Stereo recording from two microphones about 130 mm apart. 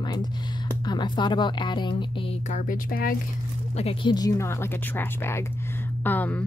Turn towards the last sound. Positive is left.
turn(degrees=15)  # may be behind; listen again after turning